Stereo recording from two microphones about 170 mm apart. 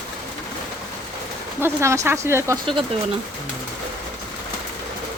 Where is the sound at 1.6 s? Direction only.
15° right (ahead or behind).